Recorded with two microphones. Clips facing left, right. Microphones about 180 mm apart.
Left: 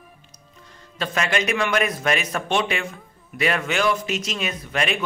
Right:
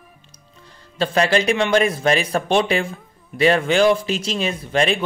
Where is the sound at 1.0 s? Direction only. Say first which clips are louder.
Right 6 dB; 35° right (ahead or behind).